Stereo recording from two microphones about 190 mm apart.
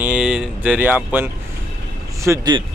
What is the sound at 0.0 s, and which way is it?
Speech, 5° right (ahead or behind).